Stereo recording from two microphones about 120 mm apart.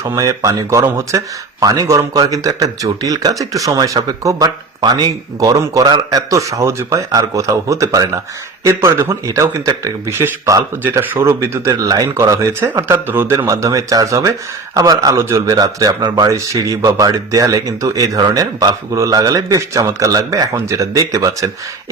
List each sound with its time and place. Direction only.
0.0 s speech: 25° right (ahead or behind)
13.4 s speech: 30° right (ahead or behind)